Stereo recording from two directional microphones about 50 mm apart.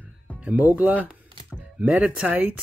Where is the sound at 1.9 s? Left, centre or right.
Right.